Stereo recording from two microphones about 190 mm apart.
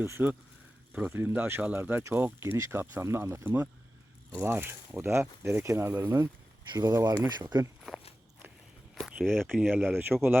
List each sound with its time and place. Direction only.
0.0 s speech: 10° right (ahead or behind)
7.9 s walk: centre (ahead or behind)
9.0 s speech: centre (ahead or behind)
9.6 s speech: 10° right (ahead or behind)